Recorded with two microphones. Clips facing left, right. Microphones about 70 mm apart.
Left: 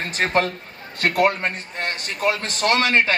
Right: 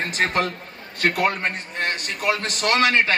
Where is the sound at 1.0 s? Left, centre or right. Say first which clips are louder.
Left 2 dB; left.